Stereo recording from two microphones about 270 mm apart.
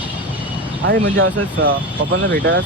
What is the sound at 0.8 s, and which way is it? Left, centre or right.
Speech, right.